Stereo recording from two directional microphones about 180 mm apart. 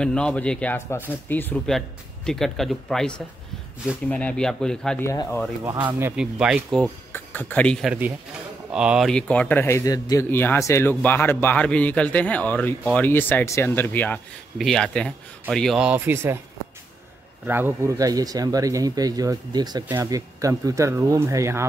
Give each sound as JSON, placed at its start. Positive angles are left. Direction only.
{"t": 0.0, "sound": "speech", "side_deg": 5}
{"t": 5.0, "sound": "speech", "side_deg": 15}
{"t": 5.6, "sound": "speech", "side_deg": -20}
{"t": 7.1, "sound": "speech", "side_deg": 10}
{"t": 17.5, "sound": "speech", "side_deg": -10}